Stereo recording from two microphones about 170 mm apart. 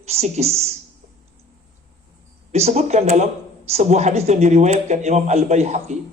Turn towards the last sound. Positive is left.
turn(degrees=-40)  # may be behind; listen again after turning